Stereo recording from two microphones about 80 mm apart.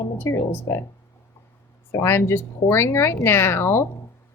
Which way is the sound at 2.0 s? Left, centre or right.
Left.